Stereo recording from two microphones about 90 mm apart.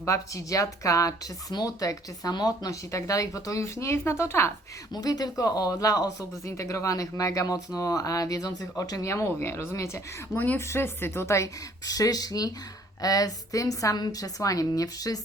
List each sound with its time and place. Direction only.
0.0 s speech: 35° left (ahead or behind)
4.9 s speech: 45° left (ahead or behind)
11.9 s speech: 40° left (ahead or behind)